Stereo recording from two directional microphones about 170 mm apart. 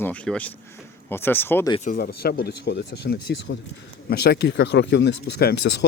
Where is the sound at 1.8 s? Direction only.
60° left (ahead or behind).